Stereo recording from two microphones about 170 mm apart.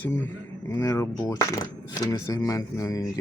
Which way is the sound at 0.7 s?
20° left (ahead or behind).